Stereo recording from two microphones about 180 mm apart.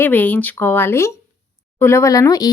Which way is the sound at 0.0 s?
10° left (ahead or behind).